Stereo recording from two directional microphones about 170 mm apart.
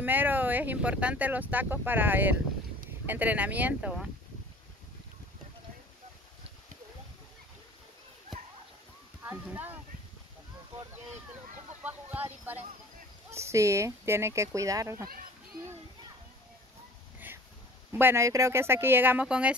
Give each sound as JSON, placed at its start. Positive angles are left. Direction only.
{"t": 0.0, "sound": "speech", "side_deg": -10}
{"t": 9.2, "sound": "speech", "side_deg": -10}
{"t": 11.8, "sound": "a sound", "side_deg": -10}
{"t": 13.3, "sound": "speech", "side_deg": -15}
{"t": 17.9, "sound": "speech", "side_deg": -15}